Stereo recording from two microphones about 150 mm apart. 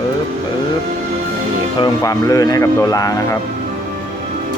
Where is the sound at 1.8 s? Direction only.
25° left (ahead or behind).